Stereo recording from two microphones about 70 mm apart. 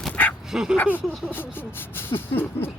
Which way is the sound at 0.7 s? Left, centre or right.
Left.